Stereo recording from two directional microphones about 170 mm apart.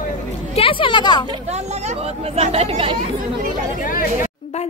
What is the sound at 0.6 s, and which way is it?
Speech, 30° left (ahead or behind).